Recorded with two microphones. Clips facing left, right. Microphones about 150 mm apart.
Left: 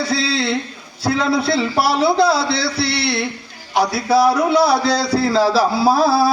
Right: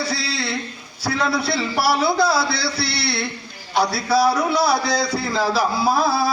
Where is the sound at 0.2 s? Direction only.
25° left (ahead or behind).